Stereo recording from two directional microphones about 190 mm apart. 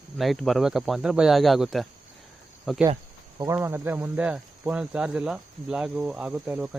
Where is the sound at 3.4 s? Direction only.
15° right (ahead or behind).